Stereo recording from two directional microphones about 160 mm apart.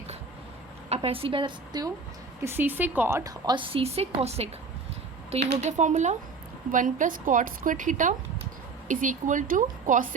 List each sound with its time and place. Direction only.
0.9 s a woman's voice: 35° right (ahead or behind)
2.4 s a woman's voice: 15° right (ahead or behind); by 4.4 s 40° right (ahead or behind)
5.5 s a woman's voice: 45° right (ahead or behind)